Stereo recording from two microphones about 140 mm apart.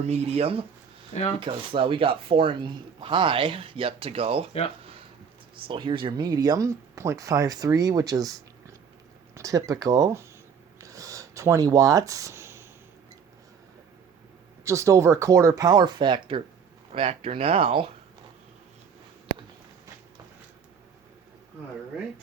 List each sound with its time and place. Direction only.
0.0 s speech: 50° right (ahead or behind)
5.6 s speech: 40° right (ahead or behind); by 10.2 s 20° right (ahead or behind)
10.8 s a sound: 25° right (ahead or behind)
14.6 s speech: 20° right (ahead or behind); by 17.9 s 40° right (ahead or behind)